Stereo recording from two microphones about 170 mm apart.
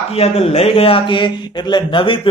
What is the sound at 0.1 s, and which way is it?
Speech, 35° left (ahead or behind).